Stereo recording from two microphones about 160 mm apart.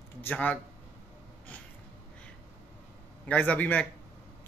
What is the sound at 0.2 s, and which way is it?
Speech, 10° left (ahead or behind).